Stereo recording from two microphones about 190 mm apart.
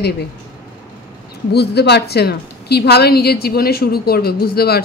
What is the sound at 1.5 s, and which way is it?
A woman's voice, 60° left (ahead or behind).